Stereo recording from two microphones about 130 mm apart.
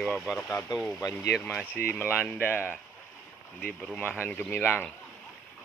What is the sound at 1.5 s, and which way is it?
Speech, 10° right (ahead or behind).